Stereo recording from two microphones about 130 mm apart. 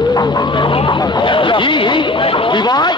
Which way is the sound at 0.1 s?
30° left (ahead or behind).